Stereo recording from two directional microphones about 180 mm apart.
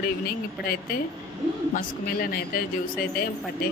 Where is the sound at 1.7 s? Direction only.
50° left (ahead or behind).